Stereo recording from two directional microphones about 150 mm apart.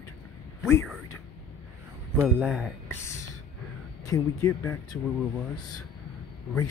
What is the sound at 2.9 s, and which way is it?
Speech, 20° left (ahead or behind).